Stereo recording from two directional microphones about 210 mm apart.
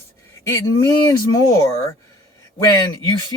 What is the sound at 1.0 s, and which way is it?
Speech, 15° left (ahead or behind).